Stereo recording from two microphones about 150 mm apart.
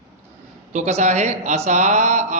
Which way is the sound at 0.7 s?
50° right (ahead or behind).